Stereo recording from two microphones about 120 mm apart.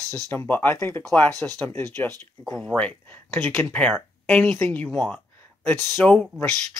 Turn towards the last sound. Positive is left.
turn(degrees=10)  # may be behind; listen again after turning